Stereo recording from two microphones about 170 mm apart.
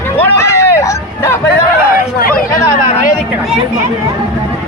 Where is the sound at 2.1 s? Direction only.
60° left (ahead or behind).